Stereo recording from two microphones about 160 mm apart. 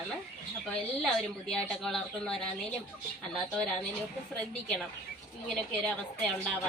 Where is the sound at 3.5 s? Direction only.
5° left (ahead or behind).